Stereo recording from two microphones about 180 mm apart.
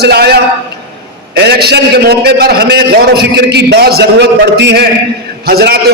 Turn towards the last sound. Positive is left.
turn(degrees=-60)  # may be behind; listen again after turning